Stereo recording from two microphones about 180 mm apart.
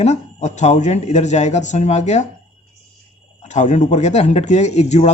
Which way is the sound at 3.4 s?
40° left (ahead or behind).